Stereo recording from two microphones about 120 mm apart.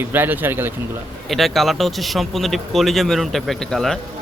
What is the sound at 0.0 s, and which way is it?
Speech, 15° right (ahead or behind).